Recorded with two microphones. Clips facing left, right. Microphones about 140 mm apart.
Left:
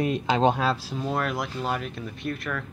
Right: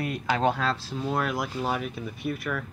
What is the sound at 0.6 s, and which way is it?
Speech, 5° left (ahead or behind).